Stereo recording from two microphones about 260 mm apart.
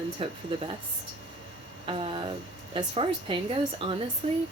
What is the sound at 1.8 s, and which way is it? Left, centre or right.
Speech, right.